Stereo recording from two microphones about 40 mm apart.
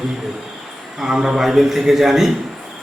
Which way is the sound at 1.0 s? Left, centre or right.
Centre.